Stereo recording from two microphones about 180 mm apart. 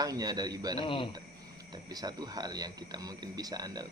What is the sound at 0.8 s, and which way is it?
Speech, 30° left (ahead or behind).